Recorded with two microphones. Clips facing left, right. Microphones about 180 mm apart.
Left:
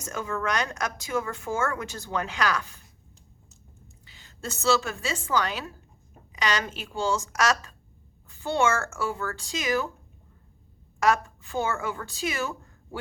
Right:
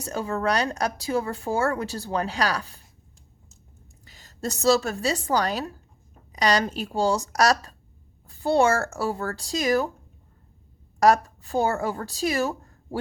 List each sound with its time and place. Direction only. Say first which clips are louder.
0.0 s speech: right 4 dB; 35° right (ahead or behind)
4.0 s a woman's voice: right 6 dB; 40° right (ahead or behind)
11.0 s a woman's voice: right 5 dB; 40° right (ahead or behind)